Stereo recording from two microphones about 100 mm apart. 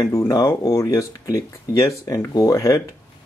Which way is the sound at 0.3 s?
35° left (ahead or behind).